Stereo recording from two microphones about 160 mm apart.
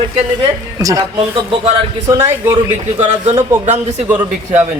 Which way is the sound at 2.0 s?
15° right (ahead or behind).